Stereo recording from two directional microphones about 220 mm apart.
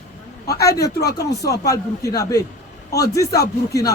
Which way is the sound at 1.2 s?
15° left (ahead or behind).